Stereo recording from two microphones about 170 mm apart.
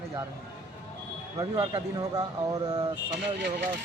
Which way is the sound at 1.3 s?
25° right (ahead or behind).